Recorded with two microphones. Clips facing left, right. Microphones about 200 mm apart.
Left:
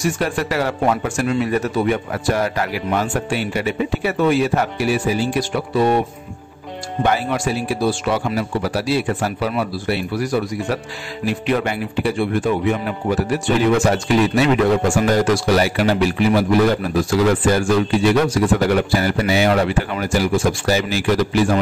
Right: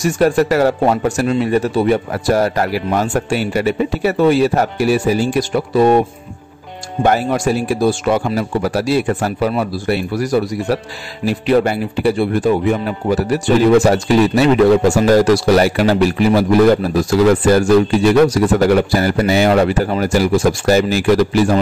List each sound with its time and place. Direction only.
0.0 s a man's voice: 40° right (ahead or behind)
7.0 s a man's voice: 45° right (ahead or behind)